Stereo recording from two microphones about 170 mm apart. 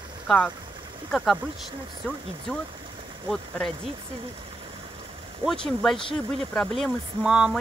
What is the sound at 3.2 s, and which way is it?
Speech, 5° left (ahead or behind).